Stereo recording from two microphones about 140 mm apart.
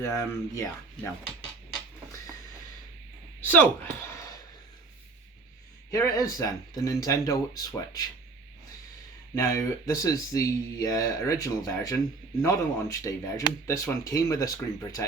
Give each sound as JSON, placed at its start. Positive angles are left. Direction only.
{"t": 0.0, "sound": "speech", "side_deg": 20}
{"t": 3.4, "sound": "speech", "side_deg": 15}
{"t": 5.9, "sound": "speech", "side_deg": 25}
{"t": 9.3, "sound": "speech", "side_deg": 20}